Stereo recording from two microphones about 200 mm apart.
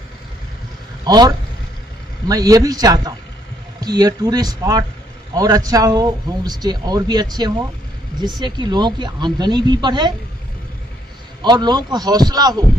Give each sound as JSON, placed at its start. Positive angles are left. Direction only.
{"t": 1.0, "sound": "a man's voice", "side_deg": -20}
{"t": 11.4, "sound": "speech", "side_deg": -20}